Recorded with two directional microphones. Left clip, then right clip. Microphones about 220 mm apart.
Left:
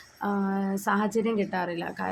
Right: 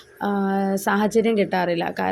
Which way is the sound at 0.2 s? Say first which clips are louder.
Right 6 dB; 20° right (ahead or behind).